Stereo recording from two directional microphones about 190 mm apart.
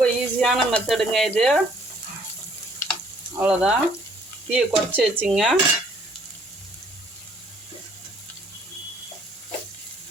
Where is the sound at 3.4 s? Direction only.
5° right (ahead or behind).